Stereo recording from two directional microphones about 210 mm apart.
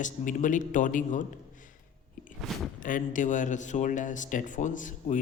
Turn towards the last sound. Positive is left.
turn(degrees=35)  # may be behind; listen again after turning